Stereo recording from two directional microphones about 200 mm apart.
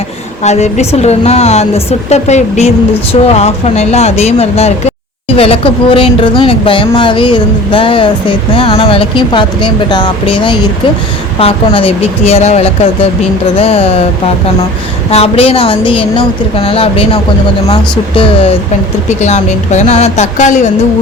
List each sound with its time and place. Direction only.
0.4 s a woman's voice: 35° left (ahead or behind)
15.1 s speech: 30° left (ahead or behind)
19.0 s a woman's voice: 35° left (ahead or behind)